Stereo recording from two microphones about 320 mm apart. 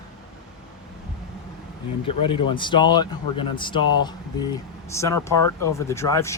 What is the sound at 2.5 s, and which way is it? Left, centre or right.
Speech, centre.